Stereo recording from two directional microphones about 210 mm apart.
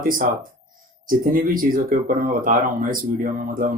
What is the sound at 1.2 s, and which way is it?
Speech, 40° right (ahead or behind).